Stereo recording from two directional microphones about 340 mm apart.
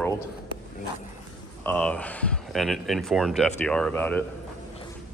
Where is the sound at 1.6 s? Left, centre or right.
Centre.